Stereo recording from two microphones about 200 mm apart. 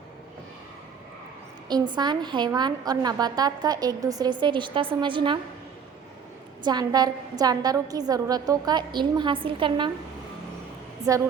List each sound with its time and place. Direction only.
1.6 s a woman's voice: 20° right (ahead or behind)
6.7 s a woman's voice: 20° right (ahead or behind)
11.1 s speech: 15° right (ahead or behind)